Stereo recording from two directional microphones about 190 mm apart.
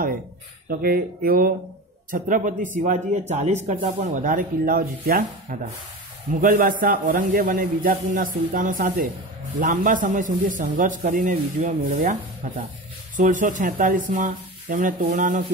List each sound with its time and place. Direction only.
0.7 s a man's voice: 50° right (ahead or behind)